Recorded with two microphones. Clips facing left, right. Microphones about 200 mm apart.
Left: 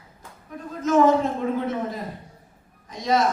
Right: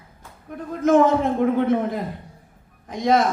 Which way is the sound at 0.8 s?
55° right (ahead or behind).